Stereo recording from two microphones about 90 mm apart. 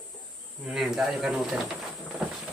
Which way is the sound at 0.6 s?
5° right (ahead or behind).